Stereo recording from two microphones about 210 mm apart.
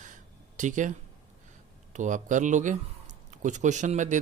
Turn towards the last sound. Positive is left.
turn(degrees=-35)  # may be behind; listen again after turning